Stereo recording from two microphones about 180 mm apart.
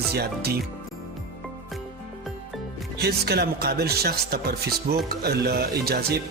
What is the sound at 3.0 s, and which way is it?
Music, 65° right (ahead or behind).